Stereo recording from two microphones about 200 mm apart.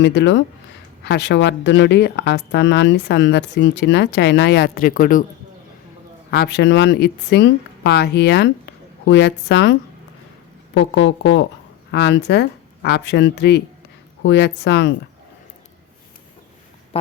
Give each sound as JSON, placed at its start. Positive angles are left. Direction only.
{"t": 0.0, "sound": "speech", "side_deg": 60}
{"t": 6.3, "sound": "speech", "side_deg": 55}
{"t": 10.8, "sound": "a woman's voice", "side_deg": 65}
{"t": 16.9, "sound": "speech", "side_deg": 30}